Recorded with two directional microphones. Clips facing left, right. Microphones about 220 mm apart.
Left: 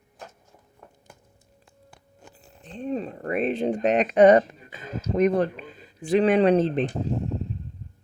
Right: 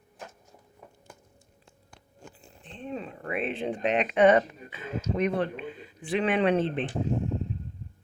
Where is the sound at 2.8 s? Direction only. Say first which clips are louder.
Left 7 dB; 40° left (ahead or behind).